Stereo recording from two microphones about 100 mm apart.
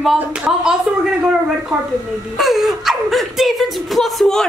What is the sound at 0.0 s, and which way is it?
Speech, 5° right (ahead or behind).